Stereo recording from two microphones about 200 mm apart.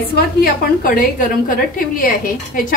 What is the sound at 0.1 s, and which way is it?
A woman's voice, 45° left (ahead or behind).